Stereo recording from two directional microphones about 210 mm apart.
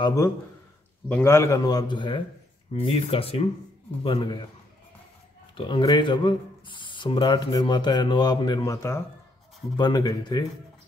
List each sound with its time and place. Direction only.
0.0 s a man's voice: 15° left (ahead or behind)
5.6 s speech: 25° left (ahead or behind)